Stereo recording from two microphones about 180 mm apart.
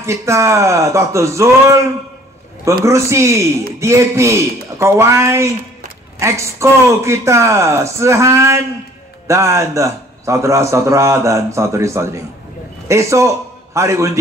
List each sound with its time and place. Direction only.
0.0 s a man's voice: 15° right (ahead or behind)
2.8 s a man's voice: 15° right (ahead or behind)